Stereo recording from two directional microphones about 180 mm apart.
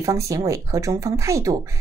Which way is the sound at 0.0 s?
15° right (ahead or behind).